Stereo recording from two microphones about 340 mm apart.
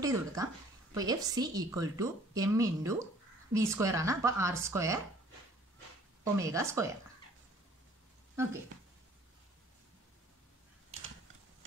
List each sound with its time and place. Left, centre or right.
0.0 s a woman's voice: centre
6.3 s a woman's voice: centre